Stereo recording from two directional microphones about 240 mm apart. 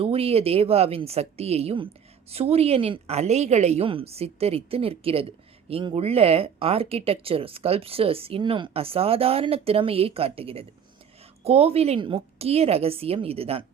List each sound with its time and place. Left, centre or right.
0.0 s speech: right